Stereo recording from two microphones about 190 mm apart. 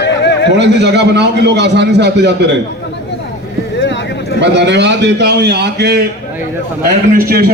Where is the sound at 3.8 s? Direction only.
65° left (ahead or behind).